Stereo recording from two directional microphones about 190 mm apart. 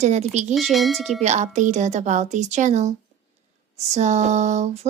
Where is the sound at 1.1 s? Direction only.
35° right (ahead or behind).